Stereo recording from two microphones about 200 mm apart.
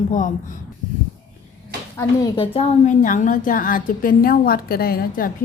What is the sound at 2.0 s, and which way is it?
A woman's voice, 20° left (ahead or behind).